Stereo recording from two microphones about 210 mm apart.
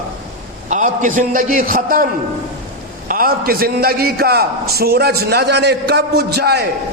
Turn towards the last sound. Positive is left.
turn(degrees=-50)  # may be behind; listen again after turning